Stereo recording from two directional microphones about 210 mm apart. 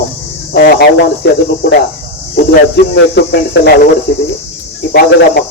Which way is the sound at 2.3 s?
50° left (ahead or behind).